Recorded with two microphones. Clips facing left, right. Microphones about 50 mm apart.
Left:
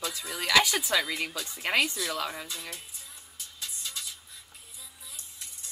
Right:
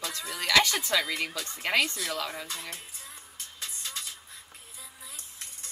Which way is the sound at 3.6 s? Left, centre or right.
Right.